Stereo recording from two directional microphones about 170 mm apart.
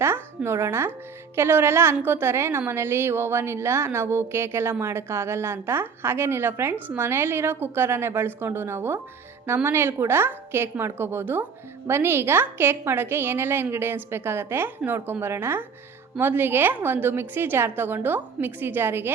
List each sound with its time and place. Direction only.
0.0 s a woman's voice: 15° right (ahead or behind)